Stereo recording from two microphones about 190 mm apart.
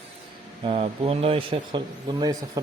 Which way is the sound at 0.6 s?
30° right (ahead or behind).